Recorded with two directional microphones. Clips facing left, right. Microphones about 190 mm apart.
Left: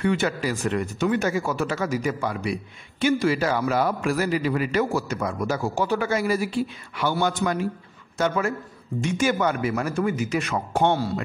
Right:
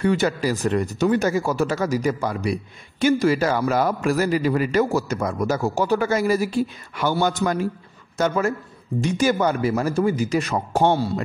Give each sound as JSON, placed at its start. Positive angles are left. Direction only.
{"t": 0.0, "sound": "speech", "side_deg": -40}
{"t": 10.9, "sound": "speech", "side_deg": -25}